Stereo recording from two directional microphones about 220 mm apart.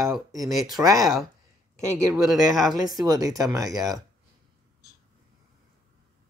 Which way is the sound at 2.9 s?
15° right (ahead or behind).